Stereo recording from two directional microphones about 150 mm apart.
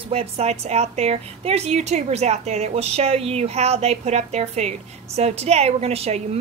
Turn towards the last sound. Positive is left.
turn(degrees=-45)  # may be behind; listen again after turning